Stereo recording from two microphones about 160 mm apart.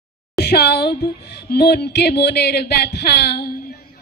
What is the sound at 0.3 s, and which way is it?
Speech, 90° left.